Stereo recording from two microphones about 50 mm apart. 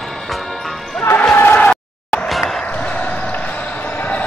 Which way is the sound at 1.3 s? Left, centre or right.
Left.